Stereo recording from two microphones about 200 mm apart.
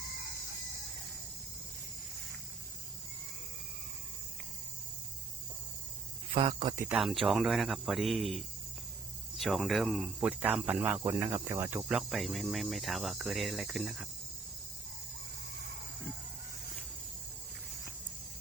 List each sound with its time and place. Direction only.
6.3 s speech: 25° right (ahead or behind)
6.8 s cricket: centre (ahead or behind)
10.9 s speech: 15° right (ahead or behind)
11.9 s cricket: centre (ahead or behind)